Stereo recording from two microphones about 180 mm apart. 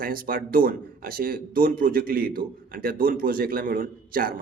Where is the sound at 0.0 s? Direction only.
50° right (ahead or behind).